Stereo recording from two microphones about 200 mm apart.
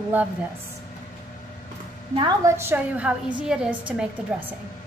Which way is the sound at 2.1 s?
20° right (ahead or behind).